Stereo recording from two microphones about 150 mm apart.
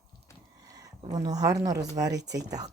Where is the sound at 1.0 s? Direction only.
25° right (ahead or behind).